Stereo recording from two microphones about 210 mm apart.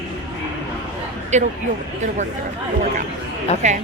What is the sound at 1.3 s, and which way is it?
Speech, 35° right (ahead or behind).